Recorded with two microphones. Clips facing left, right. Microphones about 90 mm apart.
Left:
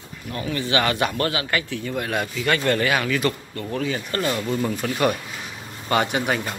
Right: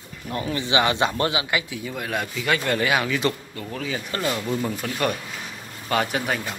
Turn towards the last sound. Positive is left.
turn(degrees=0)  # may be behind; listen again after turning